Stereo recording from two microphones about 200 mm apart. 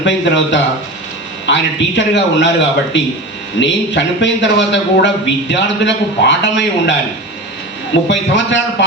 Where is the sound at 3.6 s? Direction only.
65° left (ahead or behind).